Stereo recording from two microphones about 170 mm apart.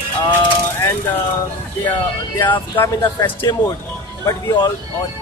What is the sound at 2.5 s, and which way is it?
Speech, 15° left (ahead or behind).